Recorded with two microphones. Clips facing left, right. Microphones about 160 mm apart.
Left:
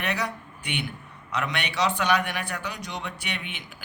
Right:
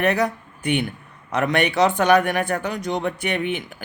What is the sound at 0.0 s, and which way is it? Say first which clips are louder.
Speech: right 9 dB; 50° right (ahead or behind).